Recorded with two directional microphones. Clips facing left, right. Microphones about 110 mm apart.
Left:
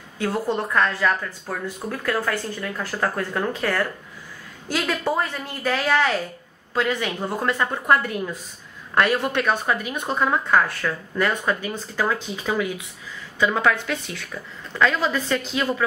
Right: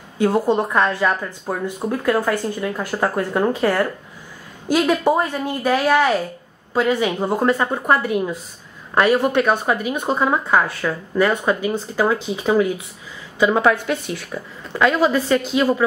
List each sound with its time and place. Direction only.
0.2 s speech: 15° right (ahead or behind)
7.9 s speech: 10° right (ahead or behind)